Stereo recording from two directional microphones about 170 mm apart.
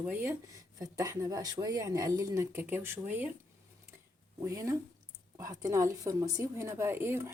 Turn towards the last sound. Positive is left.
turn(degrees=-15)  # may be behind; listen again after turning